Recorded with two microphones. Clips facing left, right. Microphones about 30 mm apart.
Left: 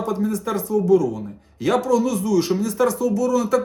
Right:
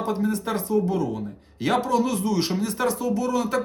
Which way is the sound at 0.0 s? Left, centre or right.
Right.